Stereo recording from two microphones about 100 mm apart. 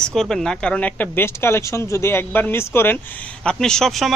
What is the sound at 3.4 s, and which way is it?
Speech, 5° left (ahead or behind).